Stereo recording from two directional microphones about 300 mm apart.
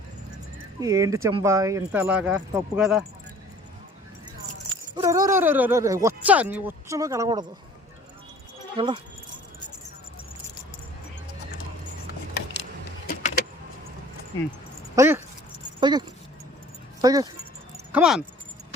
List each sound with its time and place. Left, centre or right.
0.8 s speech: centre
4.9 s speech: centre
8.7 s speech: centre
13.1 s vehicle: left
14.9 s speech: centre